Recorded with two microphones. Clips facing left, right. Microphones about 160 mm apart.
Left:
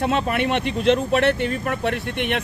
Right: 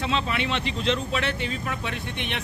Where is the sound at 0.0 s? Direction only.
55° left (ahead or behind).